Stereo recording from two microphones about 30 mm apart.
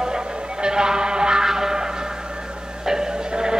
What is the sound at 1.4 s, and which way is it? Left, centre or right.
Music, centre.